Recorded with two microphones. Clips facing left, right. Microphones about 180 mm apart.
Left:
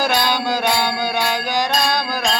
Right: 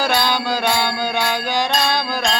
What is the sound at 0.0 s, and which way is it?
Mantra, 15° left (ahead or behind).